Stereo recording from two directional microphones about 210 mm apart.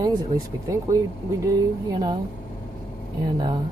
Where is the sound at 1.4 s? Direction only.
20° right (ahead or behind).